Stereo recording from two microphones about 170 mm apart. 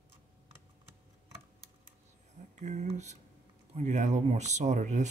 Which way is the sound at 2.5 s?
45° right (ahead or behind).